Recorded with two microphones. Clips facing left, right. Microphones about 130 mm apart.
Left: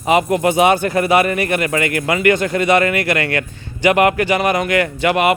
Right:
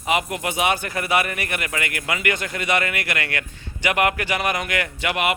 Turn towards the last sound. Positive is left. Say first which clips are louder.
# left 8 dB
turn(degrees=40)  # may be behind; listen again after turning